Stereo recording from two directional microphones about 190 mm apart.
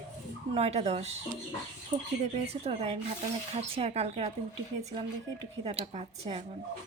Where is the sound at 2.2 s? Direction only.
35° right (ahead or behind).